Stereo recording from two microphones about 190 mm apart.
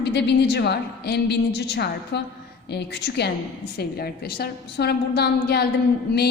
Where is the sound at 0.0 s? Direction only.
60° left (ahead or behind).